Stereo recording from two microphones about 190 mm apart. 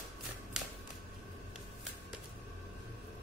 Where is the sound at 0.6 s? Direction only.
5° right (ahead or behind).